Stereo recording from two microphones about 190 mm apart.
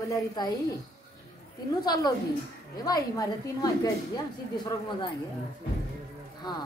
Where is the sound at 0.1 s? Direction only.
20° left (ahead or behind).